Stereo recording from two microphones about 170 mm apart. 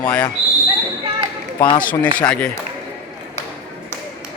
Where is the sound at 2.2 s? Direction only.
5° left (ahead or behind).